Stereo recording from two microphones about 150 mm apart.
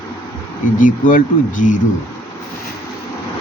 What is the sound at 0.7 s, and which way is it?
Speech, 65° left (ahead or behind).